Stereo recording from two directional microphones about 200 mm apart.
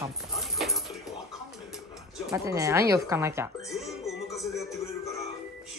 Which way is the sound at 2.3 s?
15° right (ahead or behind).